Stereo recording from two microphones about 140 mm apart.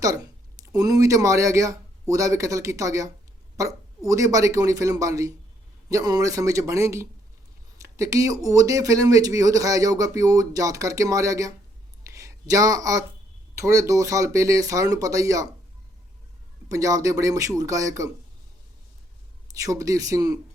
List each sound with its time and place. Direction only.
0.6 s speech: 25° right (ahead or behind)
7.8 s a sound: 20° right (ahead or behind)
8.4 s speech: 25° right (ahead or behind)
12.0 s a sound: 25° right (ahead or behind)
13.6 s speech: 20° right (ahead or behind)
16.6 s speech: 25° right (ahead or behind)
19.5 s speech: 25° right (ahead or behind)